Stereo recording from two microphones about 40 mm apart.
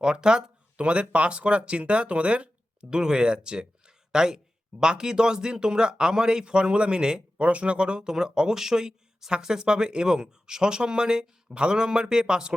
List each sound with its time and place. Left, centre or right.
0.0 s speech: right
2.9 s speech: centre
7.4 s speech: right